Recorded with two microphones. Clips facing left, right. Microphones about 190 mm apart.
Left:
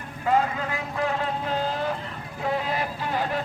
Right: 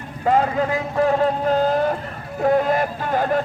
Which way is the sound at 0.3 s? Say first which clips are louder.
Right 5 dB; 40° right (ahead or behind).